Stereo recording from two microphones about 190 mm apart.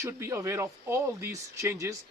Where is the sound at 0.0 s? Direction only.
15° right (ahead or behind).